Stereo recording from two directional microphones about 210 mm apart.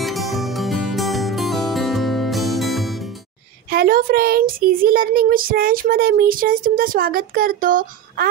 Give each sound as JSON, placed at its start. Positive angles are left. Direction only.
{"t": 0.0, "sound": "music", "side_deg": 0}
{"t": 3.7, "sound": "a child's voice", "side_deg": -45}